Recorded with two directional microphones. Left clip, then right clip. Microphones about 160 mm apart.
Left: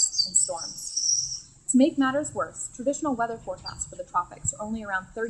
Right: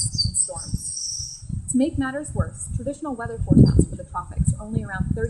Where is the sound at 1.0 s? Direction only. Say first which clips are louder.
Left 5 dB; 45° right (ahead or behind).